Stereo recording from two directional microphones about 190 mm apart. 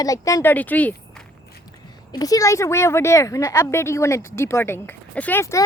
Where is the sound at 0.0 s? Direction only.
20° left (ahead or behind).